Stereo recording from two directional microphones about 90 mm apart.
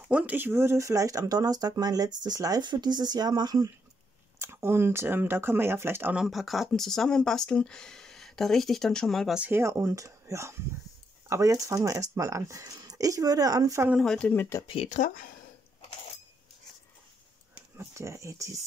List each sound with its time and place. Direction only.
0.1 s speech: 15° right (ahead or behind); by 3.7 s 45° right (ahead or behind)
4.4 s speech: 30° right (ahead or behind)
6.1 s speech: 5° right (ahead or behind)
9.5 s speech: 30° right (ahead or behind)
13.9 s speech: 10° left (ahead or behind)
17.7 s speech: 30° right (ahead or behind)